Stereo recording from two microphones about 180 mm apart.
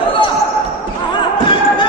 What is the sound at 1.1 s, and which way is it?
Basketball bounce, 25° left (ahead or behind).